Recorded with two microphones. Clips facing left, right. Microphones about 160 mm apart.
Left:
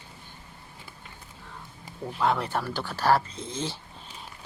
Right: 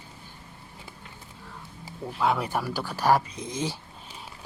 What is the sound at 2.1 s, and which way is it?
Speech, 10° right (ahead or behind).